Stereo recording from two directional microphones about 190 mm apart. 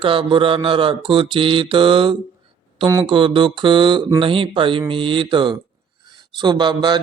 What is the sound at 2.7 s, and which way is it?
Speech, 20° right (ahead or behind).